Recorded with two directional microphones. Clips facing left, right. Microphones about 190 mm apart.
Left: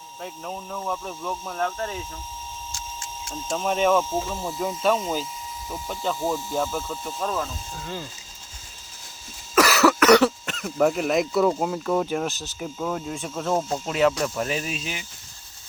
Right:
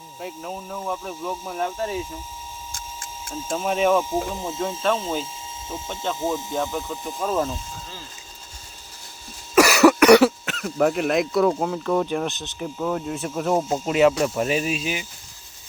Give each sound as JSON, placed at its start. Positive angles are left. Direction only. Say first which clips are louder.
{"t": 0.2, "sound": "speech", "louder": "right 2 dB", "side_deg": -5}
{"t": 3.3, "sound": "speech", "louder": "right 1 dB", "side_deg": -10}
{"t": 4.9, "sound": "speech", "louder": "left 1 dB", "side_deg": 5}
{"t": 5.2, "sound": "a sound", "louder": "even", "side_deg": -25}
{"t": 5.9, "sound": "speech", "louder": "left 1 dB", "side_deg": 0}
{"t": 6.1, "sound": "speech", "louder": "right 2 dB", "side_deg": -20}
{"t": 9.6, "sound": "speech", "louder": "right 4 dB", "side_deg": -15}